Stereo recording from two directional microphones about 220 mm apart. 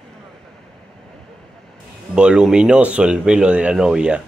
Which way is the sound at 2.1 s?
5° right (ahead or behind).